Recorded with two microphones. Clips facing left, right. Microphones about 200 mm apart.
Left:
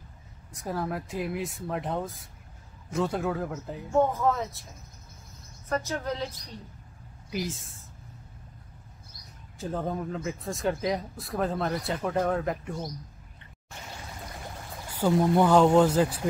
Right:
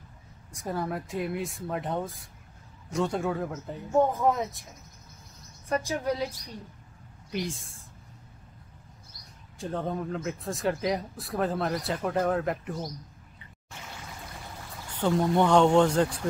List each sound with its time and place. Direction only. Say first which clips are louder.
0.5 s speech: even; centre (ahead or behind)
3.9 s speech: right 1 dB; 15° right (ahead or behind)
5.7 s speech: right 2 dB; 10° right (ahead or behind)
7.2 s speech: even; 5° left (ahead or behind)
9.6 s speech: even; centre (ahead or behind)
14.9 s speech: left 2 dB; 5° left (ahead or behind)